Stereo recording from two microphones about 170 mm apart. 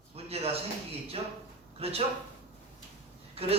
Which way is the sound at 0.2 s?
35° right (ahead or behind).